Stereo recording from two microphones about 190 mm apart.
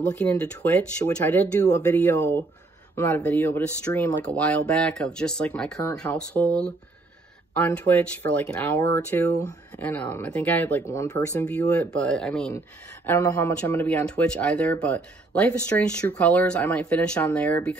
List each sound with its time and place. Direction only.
0.0 s speech: 10° left (ahead or behind)